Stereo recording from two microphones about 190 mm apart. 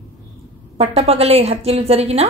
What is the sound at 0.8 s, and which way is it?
A woman's voice, 35° right (ahead or behind).